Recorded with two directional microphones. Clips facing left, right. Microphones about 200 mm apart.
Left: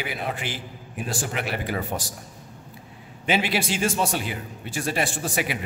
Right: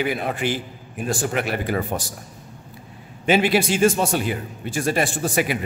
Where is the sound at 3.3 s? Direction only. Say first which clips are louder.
Right 6 dB; 50° right (ahead or behind).